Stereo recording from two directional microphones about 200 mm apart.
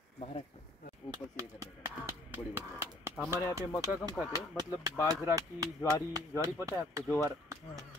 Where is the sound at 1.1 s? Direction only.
15° right (ahead or behind).